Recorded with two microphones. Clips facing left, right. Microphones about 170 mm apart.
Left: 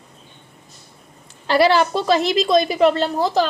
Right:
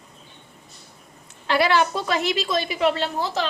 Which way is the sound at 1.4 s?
35° left (ahead or behind).